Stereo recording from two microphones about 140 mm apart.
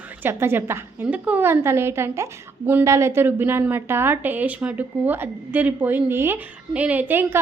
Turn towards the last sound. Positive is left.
turn(degrees=-15)  # may be behind; listen again after turning